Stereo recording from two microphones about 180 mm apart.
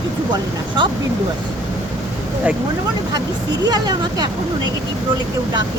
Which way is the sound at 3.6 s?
20° right (ahead or behind).